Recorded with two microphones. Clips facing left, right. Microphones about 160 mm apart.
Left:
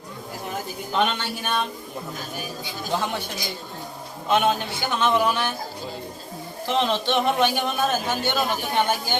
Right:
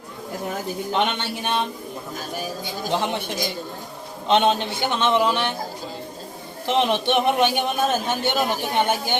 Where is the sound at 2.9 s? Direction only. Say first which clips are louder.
Right 2 dB; 20° right (ahead or behind).